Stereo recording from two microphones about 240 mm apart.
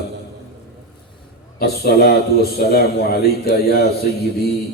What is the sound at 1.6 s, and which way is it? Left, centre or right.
A man's voice, left.